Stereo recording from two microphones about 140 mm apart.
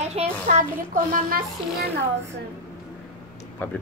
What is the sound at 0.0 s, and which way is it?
Speech, 50° right (ahead or behind).